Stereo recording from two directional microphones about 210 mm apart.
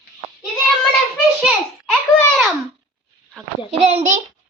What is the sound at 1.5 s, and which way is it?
A child's voice, centre (ahead or behind).